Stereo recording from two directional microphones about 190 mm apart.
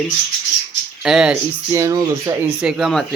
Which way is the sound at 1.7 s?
15° right (ahead or behind).